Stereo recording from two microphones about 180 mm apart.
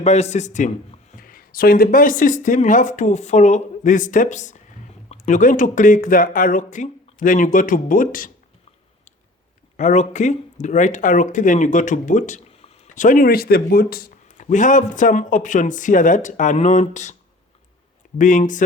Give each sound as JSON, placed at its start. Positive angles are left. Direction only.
{"t": 0.0, "sound": "speech", "side_deg": 40}
{"t": 1.1, "sound": "speech", "side_deg": 50}
{"t": 9.7, "sound": "speech", "side_deg": 40}
{"t": 18.2, "sound": "speech", "side_deg": 45}